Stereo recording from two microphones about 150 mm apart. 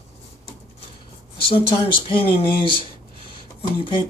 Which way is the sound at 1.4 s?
35° left (ahead or behind).